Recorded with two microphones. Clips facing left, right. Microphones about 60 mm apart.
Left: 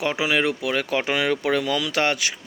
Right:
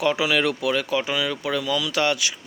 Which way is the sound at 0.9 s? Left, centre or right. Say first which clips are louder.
Left 2 dB; left.